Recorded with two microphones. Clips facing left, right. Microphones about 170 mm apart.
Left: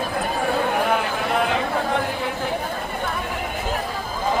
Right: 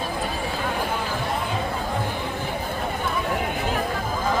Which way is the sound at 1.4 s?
75° left (ahead or behind).